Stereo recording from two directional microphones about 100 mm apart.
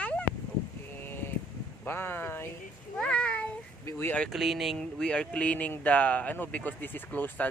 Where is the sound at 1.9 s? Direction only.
20° left (ahead or behind).